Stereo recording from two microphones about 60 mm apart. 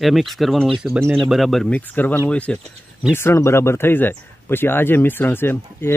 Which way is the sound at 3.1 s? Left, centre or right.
Left.